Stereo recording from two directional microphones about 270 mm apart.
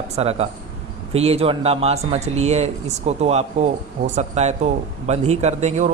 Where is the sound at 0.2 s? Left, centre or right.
Right.